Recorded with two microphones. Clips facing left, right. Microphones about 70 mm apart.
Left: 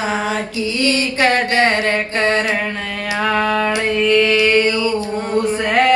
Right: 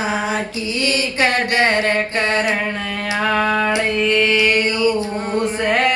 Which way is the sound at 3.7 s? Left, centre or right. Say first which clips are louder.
Left 2 dB; right.